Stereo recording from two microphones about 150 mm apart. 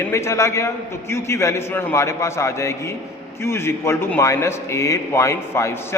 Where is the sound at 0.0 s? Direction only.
15° left (ahead or behind).